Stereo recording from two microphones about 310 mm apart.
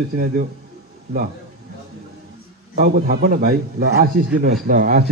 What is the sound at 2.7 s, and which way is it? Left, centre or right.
A man's voice, right.